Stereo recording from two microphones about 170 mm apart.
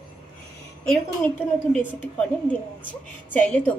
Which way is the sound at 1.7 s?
10° left (ahead or behind).